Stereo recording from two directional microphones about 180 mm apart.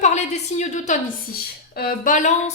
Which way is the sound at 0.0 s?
40° left (ahead or behind).